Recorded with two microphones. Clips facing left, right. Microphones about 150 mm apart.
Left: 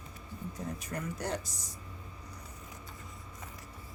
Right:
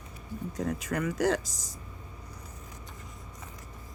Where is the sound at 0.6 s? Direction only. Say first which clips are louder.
Right 8 dB; 90° right.